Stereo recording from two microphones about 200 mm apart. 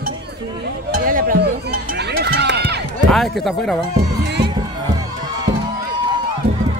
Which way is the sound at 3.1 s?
Centre (ahead or behind).